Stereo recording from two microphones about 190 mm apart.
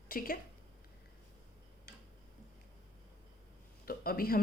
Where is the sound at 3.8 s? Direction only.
50° left (ahead or behind).